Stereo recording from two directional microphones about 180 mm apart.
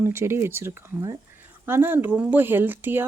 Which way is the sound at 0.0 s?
15° right (ahead or behind).